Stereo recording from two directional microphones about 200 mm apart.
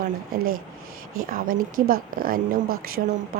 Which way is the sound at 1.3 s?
45° right (ahead or behind).